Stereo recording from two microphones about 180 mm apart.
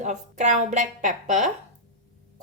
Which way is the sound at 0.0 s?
40° right (ahead or behind).